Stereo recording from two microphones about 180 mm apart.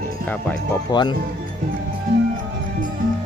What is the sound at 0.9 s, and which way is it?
Speech, 25° left (ahead or behind).